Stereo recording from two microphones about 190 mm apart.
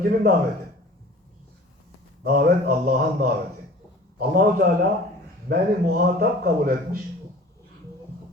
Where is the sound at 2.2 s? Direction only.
50° right (ahead or behind).